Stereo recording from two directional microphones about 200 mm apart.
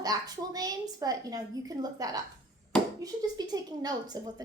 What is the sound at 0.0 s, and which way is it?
A woman's voice, 20° right (ahead or behind).